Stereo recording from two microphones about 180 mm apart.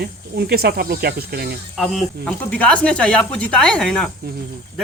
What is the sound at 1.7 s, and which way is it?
Speech, centre (ahead or behind).